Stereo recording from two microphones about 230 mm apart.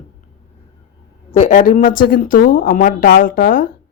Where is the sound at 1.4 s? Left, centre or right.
Left.